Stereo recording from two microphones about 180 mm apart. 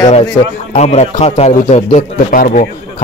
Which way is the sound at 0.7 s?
35° left (ahead or behind).